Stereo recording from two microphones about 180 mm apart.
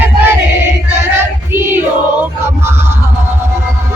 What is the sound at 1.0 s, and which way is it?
Child singing, 10° right (ahead or behind).